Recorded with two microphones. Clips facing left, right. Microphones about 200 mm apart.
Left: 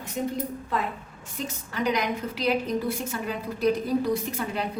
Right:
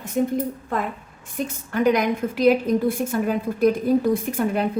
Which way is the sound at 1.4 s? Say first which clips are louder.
Right 8 dB; 55° right (ahead or behind).